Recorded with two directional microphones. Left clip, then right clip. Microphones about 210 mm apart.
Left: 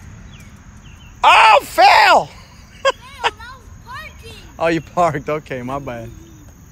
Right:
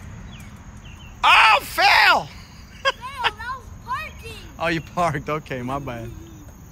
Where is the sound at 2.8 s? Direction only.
Centre (ahead or behind).